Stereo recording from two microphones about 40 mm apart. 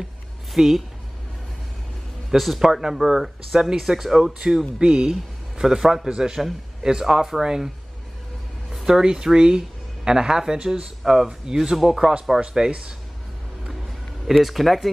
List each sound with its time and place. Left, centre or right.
0.6 s speech: centre
2.3 s a man's voice: centre
8.8 s speech: centre
12.4 s speech: right
14.2 s speech: centre